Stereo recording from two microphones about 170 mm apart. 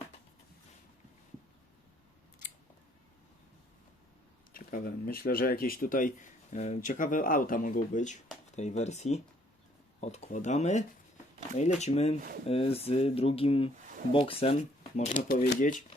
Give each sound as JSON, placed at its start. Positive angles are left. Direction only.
{"t": 4.5, "sound": "speech", "side_deg": 60}
{"t": 14.9, "sound": "speech", "side_deg": 45}